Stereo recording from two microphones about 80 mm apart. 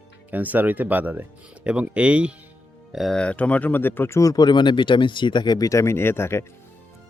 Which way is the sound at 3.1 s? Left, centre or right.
Centre.